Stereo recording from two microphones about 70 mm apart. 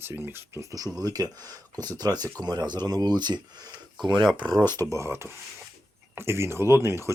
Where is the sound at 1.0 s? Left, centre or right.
Right.